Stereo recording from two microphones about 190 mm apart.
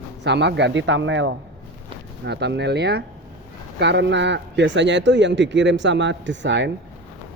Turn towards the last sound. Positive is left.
turn(degrees=-70)  # may be behind; listen again after turning